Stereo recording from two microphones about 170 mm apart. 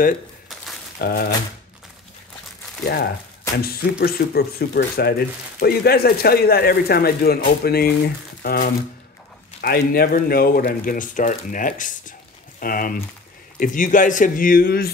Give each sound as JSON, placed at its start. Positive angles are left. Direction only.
{"t": 1.0, "sound": "speech", "side_deg": 65}
{"t": 2.8, "sound": "speech", "side_deg": 65}